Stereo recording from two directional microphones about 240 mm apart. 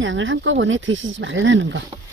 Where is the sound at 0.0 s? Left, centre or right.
Right.